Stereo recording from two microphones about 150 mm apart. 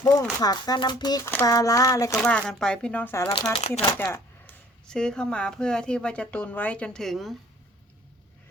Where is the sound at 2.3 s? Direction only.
5° left (ahead or behind).